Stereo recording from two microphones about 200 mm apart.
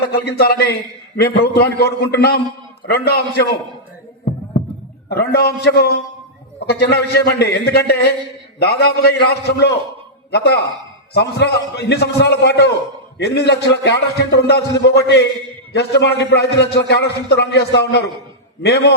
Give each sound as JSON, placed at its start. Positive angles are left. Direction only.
{"t": 0.0, "sound": "a man's voice", "side_deg": 50}
{"t": 5.0, "sound": "a man's voice", "side_deg": 55}